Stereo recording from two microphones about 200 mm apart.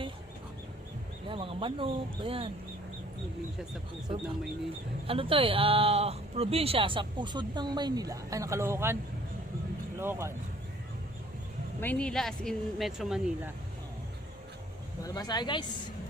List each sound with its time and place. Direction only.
1.3 s speech: 25° right (ahead or behind)
5.0 s speech: 25° right (ahead or behind); by 9.0 s 10° right (ahead or behind)
10.0 s speech: 10° right (ahead or behind)
11.8 s speech: 5° left (ahead or behind)
15.0 s speech: 20° left (ahead or behind)